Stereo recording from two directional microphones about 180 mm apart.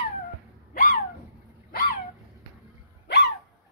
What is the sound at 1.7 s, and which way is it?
Dog, 55° left (ahead or behind).